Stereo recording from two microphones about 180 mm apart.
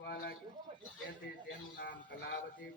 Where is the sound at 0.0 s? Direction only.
65° left (ahead or behind).